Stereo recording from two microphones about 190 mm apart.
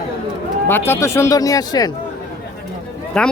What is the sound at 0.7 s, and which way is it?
Speech, 10° left (ahead or behind).